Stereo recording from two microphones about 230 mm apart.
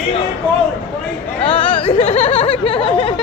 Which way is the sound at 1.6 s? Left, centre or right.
Left.